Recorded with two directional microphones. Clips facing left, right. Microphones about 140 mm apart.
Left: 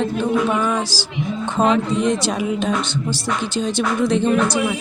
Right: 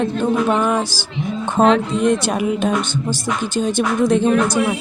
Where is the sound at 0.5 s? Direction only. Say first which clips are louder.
Right 2 dB; 55° right (ahead or behind).